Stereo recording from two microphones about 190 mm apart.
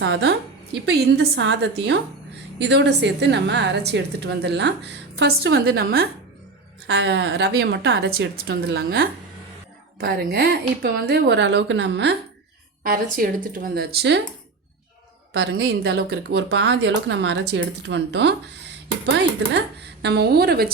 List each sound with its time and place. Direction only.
0.0 s a woman's voice: 65° right (ahead or behind)
6.8 s a woman's voice: 65° right (ahead or behind)
12.8 s speech: 50° right (ahead or behind)
15.3 s a woman's voice: 60° right (ahead or behind)